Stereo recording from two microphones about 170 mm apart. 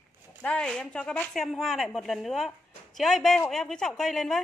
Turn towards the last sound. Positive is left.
turn(degrees=0)  # may be behind; listen again after turning